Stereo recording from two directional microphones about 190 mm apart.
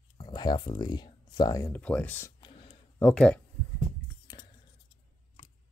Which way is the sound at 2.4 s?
25° left (ahead or behind).